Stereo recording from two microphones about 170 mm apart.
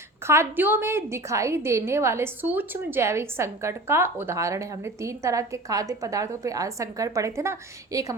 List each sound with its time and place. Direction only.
0.3 s a woman's voice: 15° right (ahead or behind)